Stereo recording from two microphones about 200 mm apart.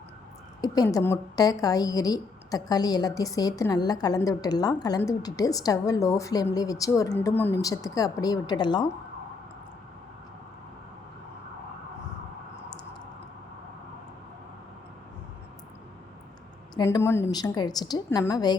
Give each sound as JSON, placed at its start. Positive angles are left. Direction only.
{"t": 0.6, "sound": "a woman's voice", "side_deg": 20}
{"t": 16.7, "sound": "a woman's voice", "side_deg": 15}